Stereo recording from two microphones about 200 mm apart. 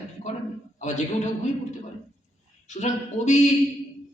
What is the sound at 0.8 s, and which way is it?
Speech, 35° left (ahead or behind).